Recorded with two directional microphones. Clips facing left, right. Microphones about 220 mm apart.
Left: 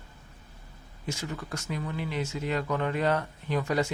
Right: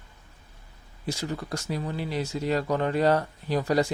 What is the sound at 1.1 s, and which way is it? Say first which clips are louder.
Speech: right 4 dB; 35° right (ahead or behind).